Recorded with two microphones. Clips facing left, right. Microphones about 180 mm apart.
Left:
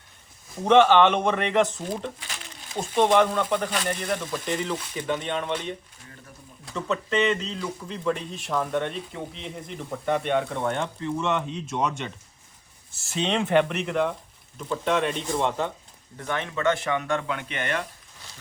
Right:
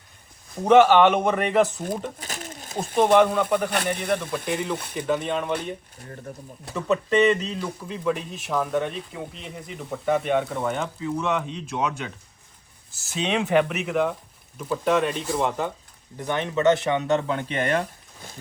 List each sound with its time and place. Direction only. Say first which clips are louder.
0.5 s speech: right 2 dB; 5° right (ahead or behind)
2.1 s crumpling: right 6 dB; 45° right (ahead or behind)
2.7 s speech: right 2 dB; 5° right (ahead or behind)
3.9 s speech: right 3 dB; 60° right (ahead or behind)
4.4 s speech: right 1 dB; 10° right (ahead or behind)
6.1 s speech: right 10 dB; 45° right (ahead or behind)
6.7 s speech: right 4 dB; 5° right (ahead or behind)
16.1 s speech: right 4 dB; 20° right (ahead or behind); by 17.8 s 35° right (ahead or behind)